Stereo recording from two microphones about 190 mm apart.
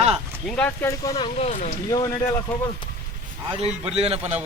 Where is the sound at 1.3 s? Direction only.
35° left (ahead or behind).